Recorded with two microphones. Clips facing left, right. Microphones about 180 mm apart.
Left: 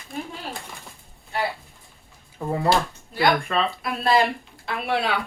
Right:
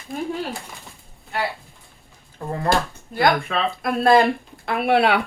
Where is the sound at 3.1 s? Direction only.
50° right (ahead or behind).